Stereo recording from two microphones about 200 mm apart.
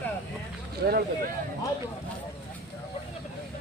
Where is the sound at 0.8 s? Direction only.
55° right (ahead or behind).